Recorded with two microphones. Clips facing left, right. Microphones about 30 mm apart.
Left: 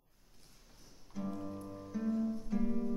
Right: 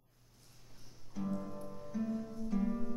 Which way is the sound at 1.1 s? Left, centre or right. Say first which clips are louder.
Right 1 dB; centre.